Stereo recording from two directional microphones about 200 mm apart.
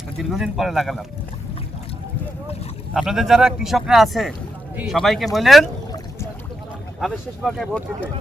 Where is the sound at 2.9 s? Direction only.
Centre (ahead or behind).